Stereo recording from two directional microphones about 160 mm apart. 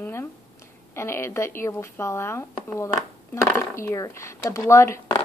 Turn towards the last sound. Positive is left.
turn(degrees=15)  # may be behind; listen again after turning